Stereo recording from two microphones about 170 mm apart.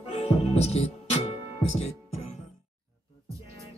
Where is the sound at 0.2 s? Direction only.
35° left (ahead or behind).